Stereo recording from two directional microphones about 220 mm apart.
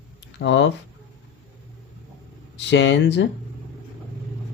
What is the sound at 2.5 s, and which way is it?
Speech, 55° left (ahead or behind).